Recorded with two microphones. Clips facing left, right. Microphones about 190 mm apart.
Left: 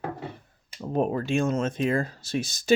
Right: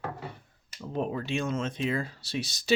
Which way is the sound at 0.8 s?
45° left (ahead or behind).